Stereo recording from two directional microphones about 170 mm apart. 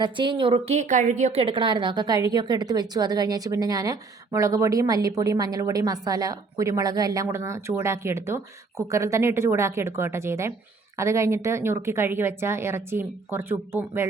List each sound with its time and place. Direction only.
0.0 s a woman's voice: 30° right (ahead or behind)